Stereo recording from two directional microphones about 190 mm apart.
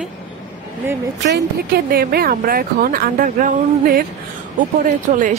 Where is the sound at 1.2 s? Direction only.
60° right (ahead or behind).